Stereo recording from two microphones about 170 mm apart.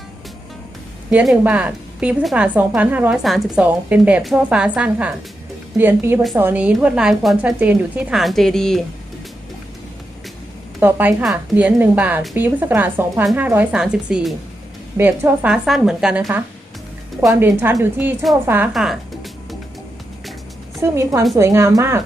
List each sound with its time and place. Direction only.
1.1 s a woman's voice: 5° right (ahead or behind)
10.8 s a woman's voice: 10° right (ahead or behind)
17.4 s a woman's voice: 15° right (ahead or behind)
18.7 s music: centre (ahead or behind)
20.8 s a woman's voice: 15° right (ahead or behind)